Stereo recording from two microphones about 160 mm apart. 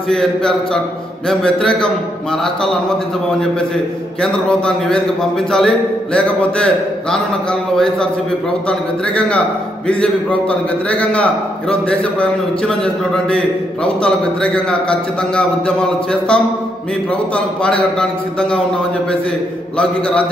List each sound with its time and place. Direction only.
0.1 s a man's voice: 5° left (ahead or behind)
4.2 s a man's voice: 5° left (ahead or behind)
10.9 s a man's voice: 5° left (ahead or behind)